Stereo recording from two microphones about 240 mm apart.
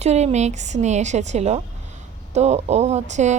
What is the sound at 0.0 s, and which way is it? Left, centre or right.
Speech, right.